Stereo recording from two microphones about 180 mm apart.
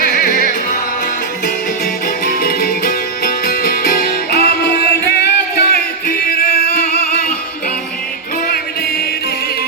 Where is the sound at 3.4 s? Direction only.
55° left (ahead or behind).